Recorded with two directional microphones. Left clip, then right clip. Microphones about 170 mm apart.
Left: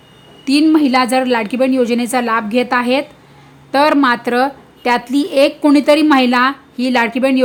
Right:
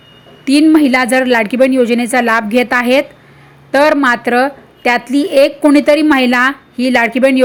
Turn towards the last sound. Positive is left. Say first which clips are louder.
# right 4 dB
turn(degrees=-10)  # may be behind; listen again after turning